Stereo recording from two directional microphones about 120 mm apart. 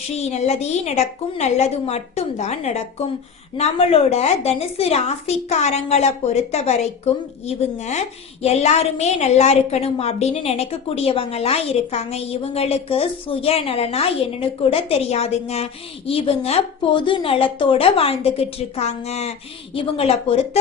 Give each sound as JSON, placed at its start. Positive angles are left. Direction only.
{"t": 0.2, "sound": "a woman's voice", "side_deg": 65}
{"t": 19.7, "sound": "a woman's voice", "side_deg": 50}